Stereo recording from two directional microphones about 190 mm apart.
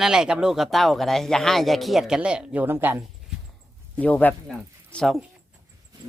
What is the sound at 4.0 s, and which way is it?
Speech, 10° left (ahead or behind).